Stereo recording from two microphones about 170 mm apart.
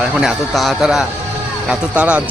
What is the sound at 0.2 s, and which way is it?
A man's voice, centre (ahead or behind).